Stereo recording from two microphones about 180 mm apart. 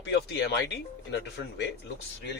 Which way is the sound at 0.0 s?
75° left (ahead or behind).